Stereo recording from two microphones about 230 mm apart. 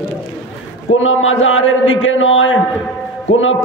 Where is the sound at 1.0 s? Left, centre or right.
Left.